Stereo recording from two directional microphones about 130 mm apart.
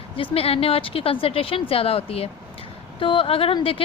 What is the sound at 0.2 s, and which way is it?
A woman's voice, 50° left (ahead or behind).